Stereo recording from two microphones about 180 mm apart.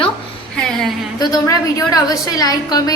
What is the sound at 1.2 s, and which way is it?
A woman's voice, 20° left (ahead or behind).